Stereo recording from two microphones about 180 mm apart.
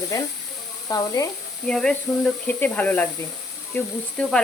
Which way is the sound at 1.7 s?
5° left (ahead or behind).